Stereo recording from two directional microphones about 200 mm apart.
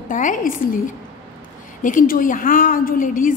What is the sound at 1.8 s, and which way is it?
A woman's voice, 45° left (ahead or behind).